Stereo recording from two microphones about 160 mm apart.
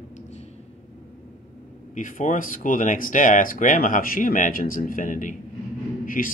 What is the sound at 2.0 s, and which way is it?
Speech, 55° left (ahead or behind).